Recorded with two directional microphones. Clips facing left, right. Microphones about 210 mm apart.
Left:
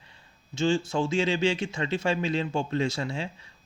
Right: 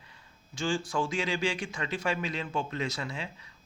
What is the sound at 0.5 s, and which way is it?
Speech, 25° left (ahead or behind).